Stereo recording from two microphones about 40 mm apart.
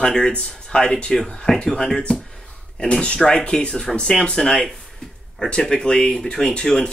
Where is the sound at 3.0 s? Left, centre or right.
Left.